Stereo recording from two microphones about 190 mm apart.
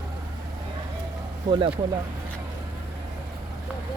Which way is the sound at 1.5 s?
20° right (ahead or behind).